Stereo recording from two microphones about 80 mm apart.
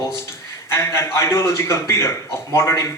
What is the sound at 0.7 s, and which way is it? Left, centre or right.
A man's voice, left.